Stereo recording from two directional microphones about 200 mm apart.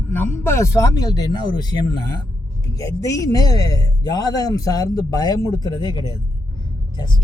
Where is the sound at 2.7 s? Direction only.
15° left (ahead or behind).